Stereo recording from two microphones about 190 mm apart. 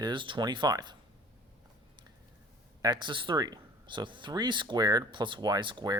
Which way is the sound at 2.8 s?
25° right (ahead or behind).